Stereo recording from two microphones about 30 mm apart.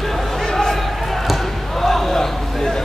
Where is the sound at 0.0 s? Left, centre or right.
Centre.